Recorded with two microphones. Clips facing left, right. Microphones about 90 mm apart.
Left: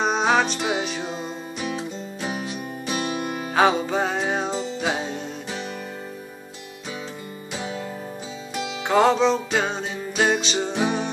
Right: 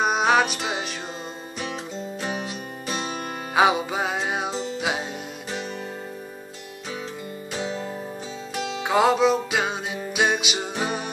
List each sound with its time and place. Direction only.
0.0 s music: 5° right (ahead or behind)
3.5 s music: 10° right (ahead or behind)
7.5 s music: 5° left (ahead or behind)